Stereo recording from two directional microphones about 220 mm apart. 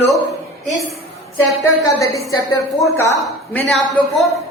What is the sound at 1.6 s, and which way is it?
Speech, 15° left (ahead or behind).